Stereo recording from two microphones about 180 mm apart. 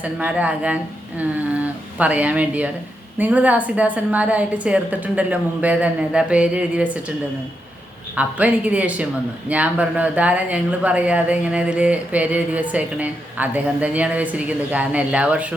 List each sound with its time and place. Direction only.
0.0 s speech: 5° right (ahead or behind)
8.1 s speech: 10° right (ahead or behind)